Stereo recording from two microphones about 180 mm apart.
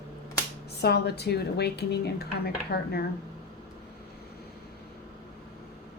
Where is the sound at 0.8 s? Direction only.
65° left (ahead or behind).